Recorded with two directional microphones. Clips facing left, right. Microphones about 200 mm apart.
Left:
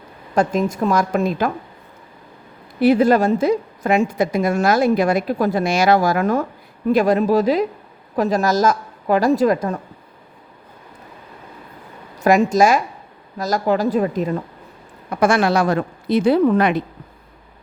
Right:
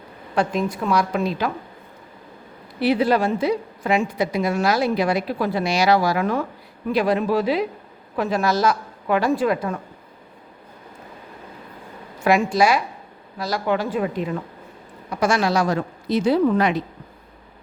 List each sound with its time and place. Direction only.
0.3 s a woman's voice: 45° left (ahead or behind)
2.8 s a woman's voice: 45° left (ahead or behind)
12.2 s a woman's voice: 40° left (ahead or behind)
15.1 s a woman's voice: 55° left (ahead or behind)